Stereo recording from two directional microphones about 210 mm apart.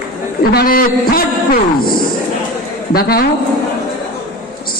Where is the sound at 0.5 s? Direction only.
45° left (ahead or behind).